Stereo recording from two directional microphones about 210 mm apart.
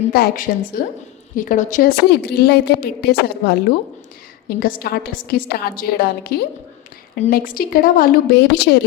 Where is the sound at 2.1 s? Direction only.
50° left (ahead or behind).